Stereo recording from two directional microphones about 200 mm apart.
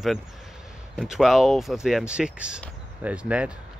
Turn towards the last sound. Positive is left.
turn(degrees=-5)  # may be behind; listen again after turning